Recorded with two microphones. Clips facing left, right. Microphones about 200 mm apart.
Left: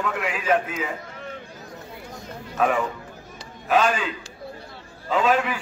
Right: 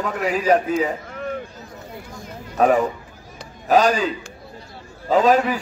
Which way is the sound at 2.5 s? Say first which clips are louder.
Right 6 dB; 40° right (ahead or behind).